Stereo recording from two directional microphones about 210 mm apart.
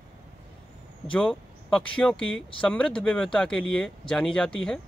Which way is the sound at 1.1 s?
5° left (ahead or behind).